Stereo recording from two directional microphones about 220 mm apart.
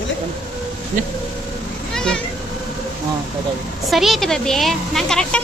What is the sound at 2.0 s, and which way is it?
Vehicle, 5° left (ahead or behind).